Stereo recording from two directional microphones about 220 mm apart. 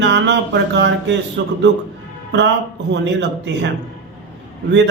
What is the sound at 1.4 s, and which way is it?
Speech, 55° right (ahead or behind).